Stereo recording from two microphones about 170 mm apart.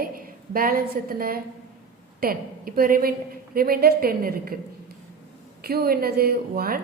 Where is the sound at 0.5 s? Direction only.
55° right (ahead or behind).